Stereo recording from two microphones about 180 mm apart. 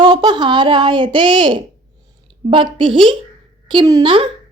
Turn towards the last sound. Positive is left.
turn(degrees=-25)  # may be behind; listen again after turning